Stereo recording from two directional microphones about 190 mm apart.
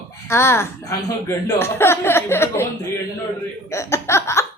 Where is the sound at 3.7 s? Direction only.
15° left (ahead or behind).